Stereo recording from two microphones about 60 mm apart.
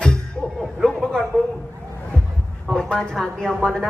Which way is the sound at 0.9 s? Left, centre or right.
Centre.